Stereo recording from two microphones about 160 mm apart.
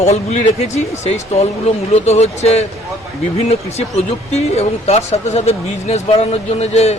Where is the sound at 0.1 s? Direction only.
45° left (ahead or behind).